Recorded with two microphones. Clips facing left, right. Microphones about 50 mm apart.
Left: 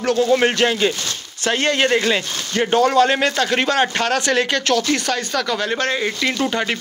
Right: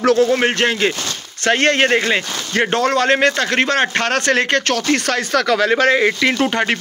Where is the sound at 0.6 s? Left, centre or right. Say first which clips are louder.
Right 1 dB; right.